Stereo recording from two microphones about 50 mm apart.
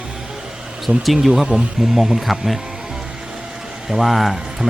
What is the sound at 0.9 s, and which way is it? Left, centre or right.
Speech, centre.